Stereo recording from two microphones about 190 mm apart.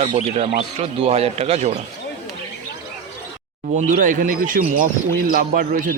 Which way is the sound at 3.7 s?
45° right (ahead or behind).